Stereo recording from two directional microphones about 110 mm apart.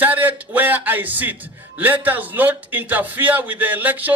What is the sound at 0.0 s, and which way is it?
A man's voice, 15° right (ahead or behind).